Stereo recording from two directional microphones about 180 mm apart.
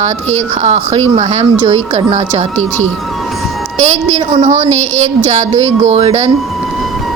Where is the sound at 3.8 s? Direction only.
40° right (ahead or behind).